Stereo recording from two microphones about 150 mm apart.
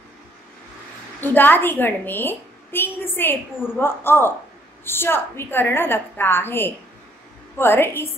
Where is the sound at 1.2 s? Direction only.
15° left (ahead or behind).